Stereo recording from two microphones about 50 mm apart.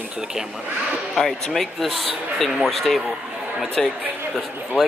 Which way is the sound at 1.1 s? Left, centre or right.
Centre.